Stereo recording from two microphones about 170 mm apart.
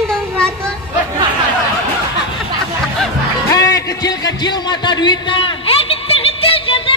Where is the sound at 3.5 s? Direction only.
20° left (ahead or behind).